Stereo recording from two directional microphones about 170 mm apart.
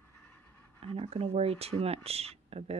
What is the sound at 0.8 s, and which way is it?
Speech, 35° right (ahead or behind).